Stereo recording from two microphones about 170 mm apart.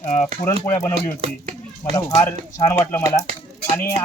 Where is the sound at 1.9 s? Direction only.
15° left (ahead or behind).